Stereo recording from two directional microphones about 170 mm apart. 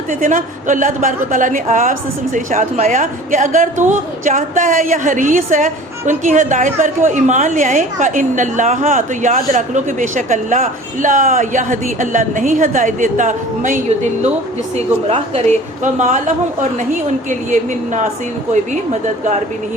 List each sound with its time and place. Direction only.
0.1 s a woman's voice: 50° right (ahead or behind)
14.8 s a woman's voice: 40° right (ahead or behind)